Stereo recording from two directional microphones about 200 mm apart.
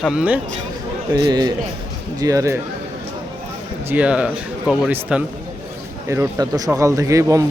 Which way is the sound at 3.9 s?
5° right (ahead or behind).